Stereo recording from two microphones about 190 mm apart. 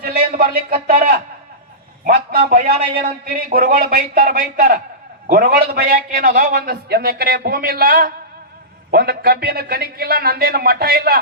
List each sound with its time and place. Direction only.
0.3 s a man's voice: 50° right (ahead or behind)